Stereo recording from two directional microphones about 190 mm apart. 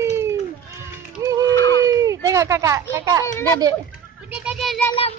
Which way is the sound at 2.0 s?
15° right (ahead or behind).